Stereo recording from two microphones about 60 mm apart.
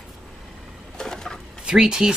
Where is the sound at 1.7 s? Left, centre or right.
Centre.